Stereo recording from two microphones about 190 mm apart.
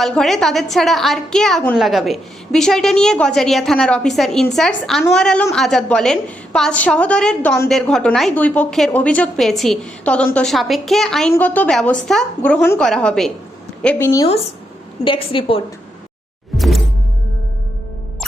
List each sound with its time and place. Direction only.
0.0 s a woman's voice: centre (ahead or behind)
13.8 s a woman's voice: 15° left (ahead or behind)
15.0 s a woman's voice: 25° left (ahead or behind)
16.6 s music: centre (ahead or behind)